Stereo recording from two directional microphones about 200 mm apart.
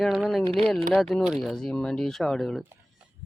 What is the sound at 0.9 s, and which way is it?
Speech, centre (ahead or behind).